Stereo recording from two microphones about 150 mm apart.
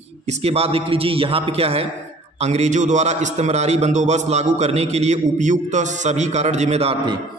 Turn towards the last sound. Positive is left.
turn(degrees=-45)  # may be behind; listen again after turning